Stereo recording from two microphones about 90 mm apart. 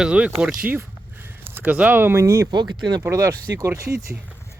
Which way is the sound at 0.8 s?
25° right (ahead or behind).